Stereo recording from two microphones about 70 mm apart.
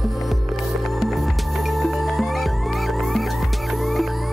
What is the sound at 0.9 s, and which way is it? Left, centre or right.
Music, centre.